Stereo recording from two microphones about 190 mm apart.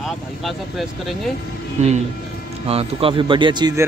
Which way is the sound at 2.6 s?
30° right (ahead or behind).